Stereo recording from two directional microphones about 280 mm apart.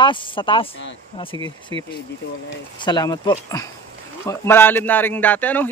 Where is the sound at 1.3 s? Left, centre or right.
Centre.